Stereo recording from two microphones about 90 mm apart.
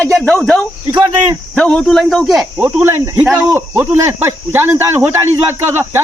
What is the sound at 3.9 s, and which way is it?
Speech, 35° right (ahead or behind).